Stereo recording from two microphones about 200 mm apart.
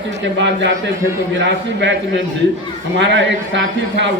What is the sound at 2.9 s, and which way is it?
A man's voice, 60° right (ahead or behind).